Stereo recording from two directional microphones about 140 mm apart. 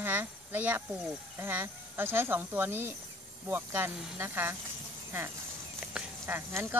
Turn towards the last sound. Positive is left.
turn(degrees=-15)  # may be behind; listen again after turning